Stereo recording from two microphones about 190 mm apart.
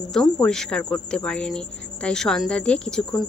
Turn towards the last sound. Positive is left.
turn(degrees=5)  # may be behind; listen again after turning